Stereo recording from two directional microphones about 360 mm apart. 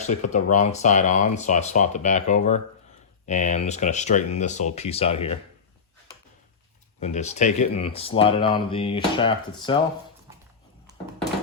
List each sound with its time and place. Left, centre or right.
0.3 s speech: left
7.0 s speech: centre